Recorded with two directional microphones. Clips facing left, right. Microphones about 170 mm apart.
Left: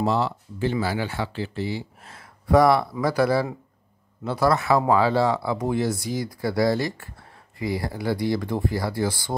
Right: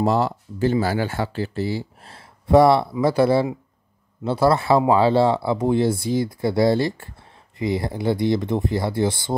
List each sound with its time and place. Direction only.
0.0 s speech: 45° right (ahead or behind); by 9.3 s 25° right (ahead or behind)